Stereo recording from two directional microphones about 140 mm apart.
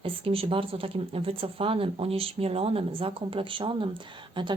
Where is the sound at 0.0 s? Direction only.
40° right (ahead or behind).